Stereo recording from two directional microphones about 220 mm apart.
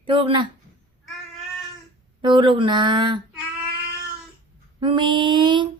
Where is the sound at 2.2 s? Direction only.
20° right (ahead or behind).